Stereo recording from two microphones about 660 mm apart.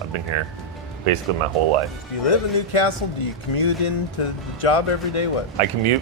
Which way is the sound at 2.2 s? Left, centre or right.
Left.